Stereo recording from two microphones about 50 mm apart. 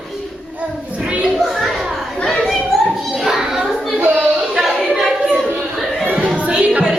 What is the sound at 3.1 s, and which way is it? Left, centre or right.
Children playing, centre.